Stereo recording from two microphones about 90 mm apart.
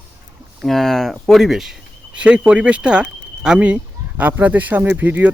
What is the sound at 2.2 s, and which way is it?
Speech, 15° right (ahead or behind).